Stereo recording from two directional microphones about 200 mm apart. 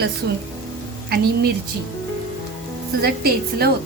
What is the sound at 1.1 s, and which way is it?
Speech, 50° right (ahead or behind).